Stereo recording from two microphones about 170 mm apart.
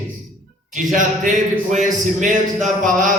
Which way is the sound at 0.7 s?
50° right (ahead or behind).